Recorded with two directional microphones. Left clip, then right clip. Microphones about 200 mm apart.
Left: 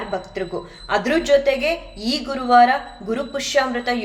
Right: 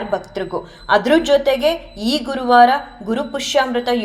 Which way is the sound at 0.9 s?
20° right (ahead or behind).